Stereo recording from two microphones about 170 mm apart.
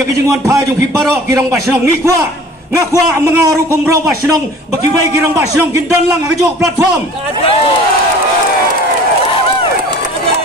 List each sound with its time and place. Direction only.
1.0 s a man's voice: 15° right (ahead or behind)
2.9 s a man's voice: 20° right (ahead or behind)
5.1 s a man's voice: 15° right (ahead or behind)